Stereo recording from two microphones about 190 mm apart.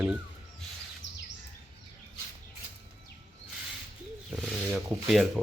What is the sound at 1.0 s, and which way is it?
Bird vocalization, 65° left (ahead or behind).